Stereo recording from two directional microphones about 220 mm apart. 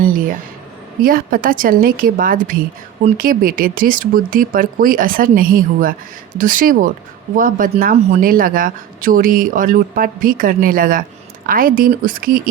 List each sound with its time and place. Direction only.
1.0 s speech: 40° right (ahead or behind)